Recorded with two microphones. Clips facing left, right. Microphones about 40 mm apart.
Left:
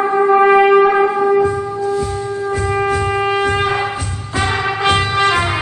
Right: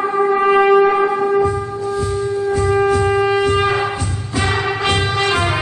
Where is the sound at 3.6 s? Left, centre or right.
Left.